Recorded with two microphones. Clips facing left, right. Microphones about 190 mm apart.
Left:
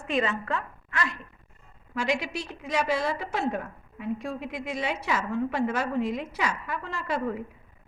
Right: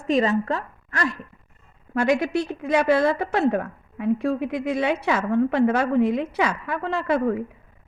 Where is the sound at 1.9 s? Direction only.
55° right (ahead or behind).